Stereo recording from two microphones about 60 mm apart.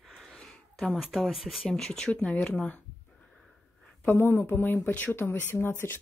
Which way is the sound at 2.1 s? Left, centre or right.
Left.